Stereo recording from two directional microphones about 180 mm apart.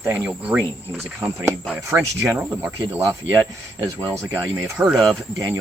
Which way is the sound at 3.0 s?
20° right (ahead or behind).